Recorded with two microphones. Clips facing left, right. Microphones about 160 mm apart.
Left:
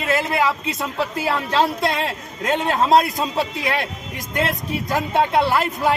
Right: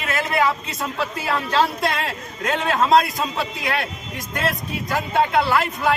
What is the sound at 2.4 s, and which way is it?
Speech, 20° left (ahead or behind).